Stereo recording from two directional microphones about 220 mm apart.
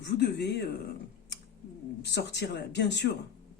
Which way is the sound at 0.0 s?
50° left (ahead or behind).